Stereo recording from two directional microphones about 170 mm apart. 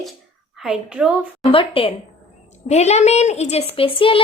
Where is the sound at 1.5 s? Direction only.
30° left (ahead or behind).